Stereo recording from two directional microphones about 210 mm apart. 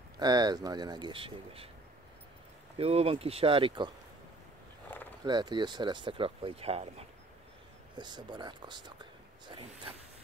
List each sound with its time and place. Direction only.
0.2 s speech: 20° right (ahead or behind)
2.8 s speech: 30° right (ahead or behind)
5.2 s speech: 20° right (ahead or behind)
9.5 s a sound: 25° right (ahead or behind)